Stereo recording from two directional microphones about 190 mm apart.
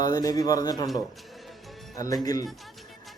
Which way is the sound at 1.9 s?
20° left (ahead or behind).